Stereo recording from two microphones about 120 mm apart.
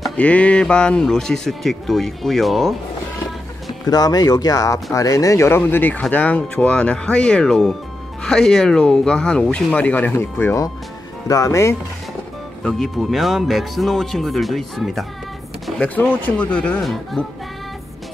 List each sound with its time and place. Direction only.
0.2 s speech: 10° left (ahead or behind)
3.8 s speech: 35° left (ahead or behind)
12.6 s speech: 5° left (ahead or behind)